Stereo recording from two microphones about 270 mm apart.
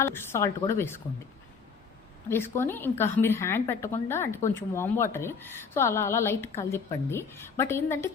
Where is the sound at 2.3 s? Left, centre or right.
Centre.